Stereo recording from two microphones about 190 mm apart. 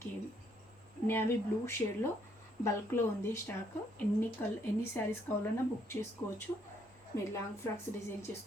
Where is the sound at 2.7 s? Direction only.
15° left (ahead or behind).